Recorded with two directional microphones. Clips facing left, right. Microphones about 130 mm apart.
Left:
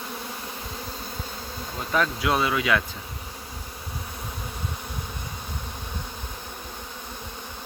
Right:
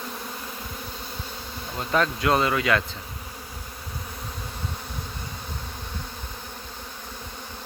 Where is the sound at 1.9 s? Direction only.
5° left (ahead or behind).